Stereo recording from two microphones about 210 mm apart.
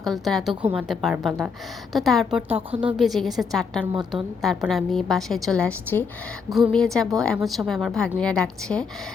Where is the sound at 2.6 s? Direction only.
25° right (ahead or behind).